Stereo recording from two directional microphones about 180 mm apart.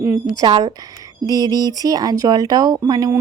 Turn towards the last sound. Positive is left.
turn(degrees=-20)  # may be behind; listen again after turning